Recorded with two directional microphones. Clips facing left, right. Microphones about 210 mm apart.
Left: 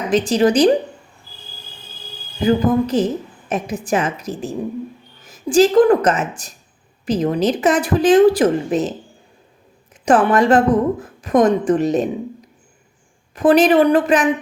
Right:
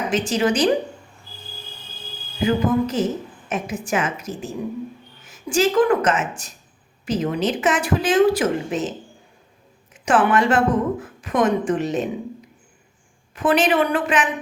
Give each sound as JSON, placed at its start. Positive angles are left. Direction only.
{"t": 0.1, "sound": "a woman's voice", "side_deg": 35}
{"t": 2.4, "sound": "a woman's voice", "side_deg": 35}
{"t": 9.9, "sound": "a woman's voice", "side_deg": 40}
{"t": 13.3, "sound": "a woman's voice", "side_deg": 40}